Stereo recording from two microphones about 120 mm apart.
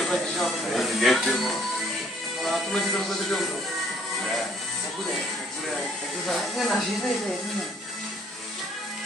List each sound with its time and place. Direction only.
0.0 s speech: centre (ahead or behind)
6.2 s speech: centre (ahead or behind)